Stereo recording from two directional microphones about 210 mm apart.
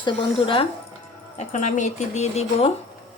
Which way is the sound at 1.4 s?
35° left (ahead or behind).